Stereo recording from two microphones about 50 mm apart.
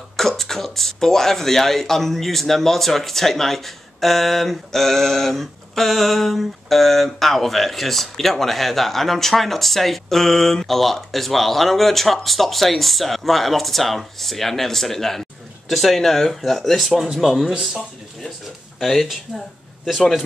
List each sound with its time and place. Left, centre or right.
0.2 s speech: centre